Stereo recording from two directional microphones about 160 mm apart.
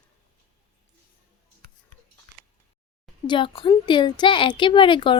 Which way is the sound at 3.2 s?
30° left (ahead or behind).